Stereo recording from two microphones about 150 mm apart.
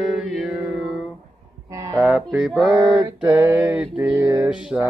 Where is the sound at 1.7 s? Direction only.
20° right (ahead or behind).